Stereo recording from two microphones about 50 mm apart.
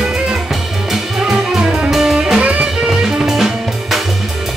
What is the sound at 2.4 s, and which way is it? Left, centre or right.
Music, right.